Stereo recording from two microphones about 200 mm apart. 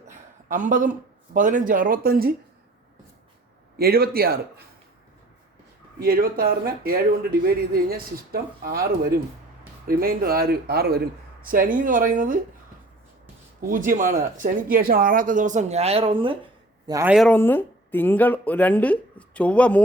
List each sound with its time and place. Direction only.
0.1 s speech: 40° right (ahead or behind)
3.8 s speech: 50° right (ahead or behind)
6.0 s speech: 45° right (ahead or behind)
13.6 s a man's voice: 45° right (ahead or behind); by 17.1 s 15° right (ahead or behind)
17.1 s speech: centre (ahead or behind)